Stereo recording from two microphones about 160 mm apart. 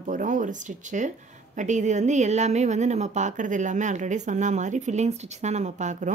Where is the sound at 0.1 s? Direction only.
55° right (ahead or behind).